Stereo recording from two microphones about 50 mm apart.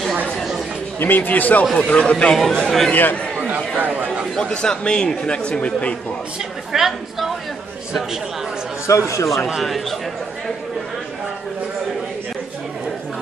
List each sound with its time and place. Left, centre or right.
0.9 s speech: left
1.7 s a woman's voice: centre
2.0 s speech: left
2.3 s a woman's voice: centre
2.9 s speech: left
4.6 s a man's voice: centre
6.7 s a woman's voice: centre
8.8 s speech: left
9.6 s a woman's voice: centre